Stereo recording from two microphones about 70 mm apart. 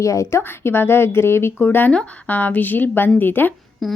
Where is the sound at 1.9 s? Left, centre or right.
Centre.